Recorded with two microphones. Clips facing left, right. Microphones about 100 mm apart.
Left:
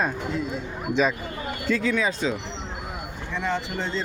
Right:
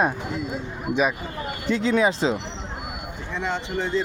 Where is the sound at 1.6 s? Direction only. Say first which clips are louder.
Right 3 dB; 25° right (ahead or behind).